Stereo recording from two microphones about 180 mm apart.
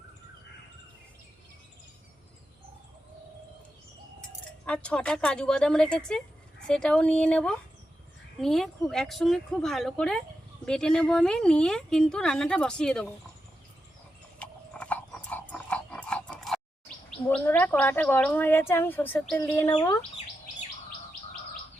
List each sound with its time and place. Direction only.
4.6 s a woman's voice: 5° left (ahead or behind)
14.3 s horse: 5° left (ahead or behind)
17.1 s gargling: 5° left (ahead or behind)
17.4 s speech: 10° left (ahead or behind)